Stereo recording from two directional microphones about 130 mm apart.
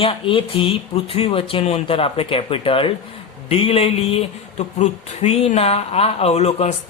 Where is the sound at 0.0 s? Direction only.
45° left (ahead or behind).